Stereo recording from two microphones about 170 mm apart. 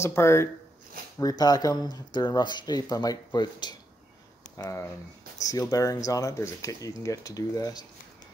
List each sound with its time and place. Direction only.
0.0 s speech: 15° left (ahead or behind)